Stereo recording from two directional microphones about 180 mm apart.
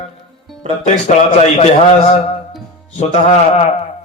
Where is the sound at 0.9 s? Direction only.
35° left (ahead or behind).